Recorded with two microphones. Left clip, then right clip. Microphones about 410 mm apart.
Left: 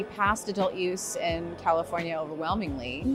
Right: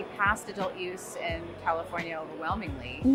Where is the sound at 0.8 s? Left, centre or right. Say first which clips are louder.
Left 5 dB; left.